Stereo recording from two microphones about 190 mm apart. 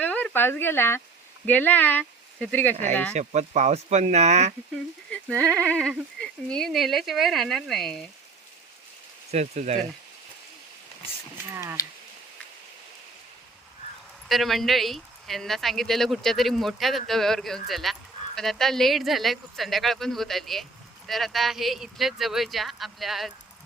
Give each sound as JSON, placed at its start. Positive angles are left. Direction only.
{"t": 0.0, "sound": "speech", "side_deg": 5}
{"t": 3.2, "sound": "speech", "side_deg": -35}
{"t": 5.1, "sound": "sheep", "side_deg": 5}
{"t": 5.5, "sound": "speech", "side_deg": 5}
{"t": 9.3, "sound": "speech", "side_deg": -35}
{"t": 11.5, "sound": "speech", "side_deg": -15}
{"t": 14.3, "sound": "speech", "side_deg": 0}